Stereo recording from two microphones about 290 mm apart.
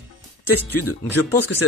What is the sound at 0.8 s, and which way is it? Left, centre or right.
Speech, left.